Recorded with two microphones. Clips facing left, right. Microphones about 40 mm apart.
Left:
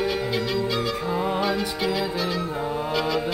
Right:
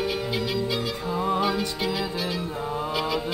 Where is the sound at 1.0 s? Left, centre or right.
Centre.